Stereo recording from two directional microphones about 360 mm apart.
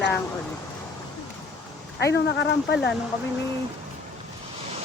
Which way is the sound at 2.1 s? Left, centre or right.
Left.